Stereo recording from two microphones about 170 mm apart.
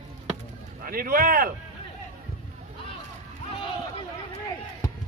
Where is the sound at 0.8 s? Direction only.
60° right (ahead or behind).